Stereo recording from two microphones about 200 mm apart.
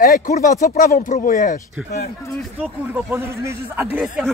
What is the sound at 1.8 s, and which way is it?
Speech, 10° right (ahead or behind).